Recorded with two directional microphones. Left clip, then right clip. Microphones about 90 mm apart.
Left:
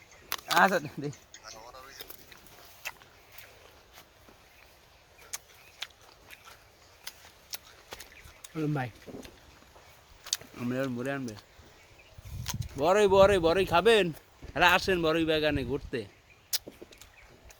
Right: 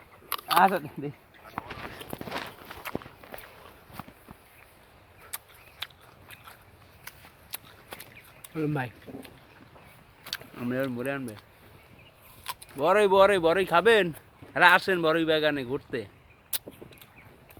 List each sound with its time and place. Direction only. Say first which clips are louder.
0.3 s a sound: right 3 dB; 20° left (ahead or behind)
0.6 s speech: right 1 dB; 45° left (ahead or behind)
5.3 s a sound: left 1 dB; centre (ahead or behind)
5.8 s biting: right 2 dB; centre (ahead or behind)
7.1 s shuffling cards: left 1 dB; 15° right (ahead or behind)
7.5 s walk: right 1 dB; 15° left (ahead or behind)
10.2 s speech: even; 15° left (ahead or behind)
12.5 s a sound: right 1 dB; 15° left (ahead or behind)
12.8 s speech: right 1 dB; 25° left (ahead or behind)
16.5 s arrow: left 3 dB; 20° left (ahead or behind)